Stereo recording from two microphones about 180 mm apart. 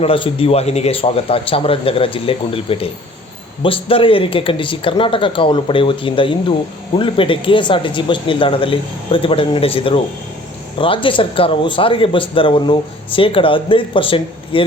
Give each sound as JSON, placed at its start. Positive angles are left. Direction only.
{"t": 0.0, "sound": "speech", "side_deg": 30}